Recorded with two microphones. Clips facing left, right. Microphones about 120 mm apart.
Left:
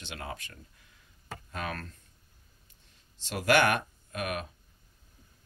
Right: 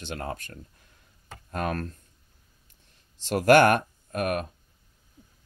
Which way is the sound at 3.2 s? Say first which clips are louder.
Right 7 dB; 45° right (ahead or behind).